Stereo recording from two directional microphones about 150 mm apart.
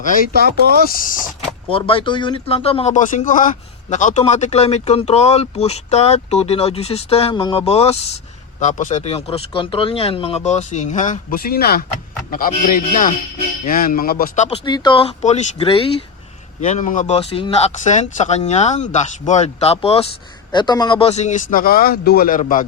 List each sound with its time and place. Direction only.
0.4 s speech: 85° right
0.9 s a man's voice: 70° left (ahead or behind)
1.7 s speech: 35° left (ahead or behind); by 11.9 s 90° left
12.3 s a man's voice: 65° left (ahead or behind)
13.7 s a man's voice: 75° left (ahead or behind)
14.3 s speech: 50° left (ahead or behind)
14.6 s speech: 30° left (ahead or behind)
15.2 s speech: 50° left (ahead or behind)
16.6 s speech: 55° left (ahead or behind)
20.5 s speech: 30° left (ahead or behind); by 22.6 s 65° left (ahead or behind)